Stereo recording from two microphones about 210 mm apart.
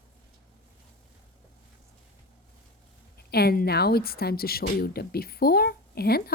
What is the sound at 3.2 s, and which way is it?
Speech, 50° left (ahead or behind).